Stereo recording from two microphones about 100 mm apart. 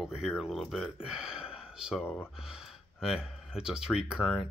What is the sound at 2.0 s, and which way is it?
Speech, 20° left (ahead or behind).